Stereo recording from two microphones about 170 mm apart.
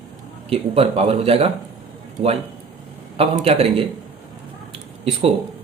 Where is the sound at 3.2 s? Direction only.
35° right (ahead or behind).